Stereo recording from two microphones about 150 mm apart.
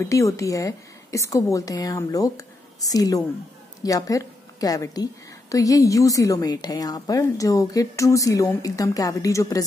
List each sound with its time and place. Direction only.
0.0 s a woman's voice: 20° left (ahead or behind)